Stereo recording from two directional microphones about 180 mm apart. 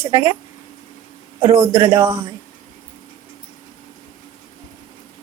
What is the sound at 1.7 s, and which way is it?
Speech, 15° right (ahead or behind).